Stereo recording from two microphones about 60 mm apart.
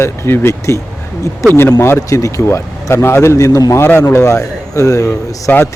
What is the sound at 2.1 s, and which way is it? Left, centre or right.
Speech, left.